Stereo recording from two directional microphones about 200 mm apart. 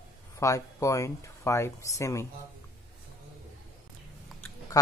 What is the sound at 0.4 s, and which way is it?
Speech, 15° left (ahead or behind).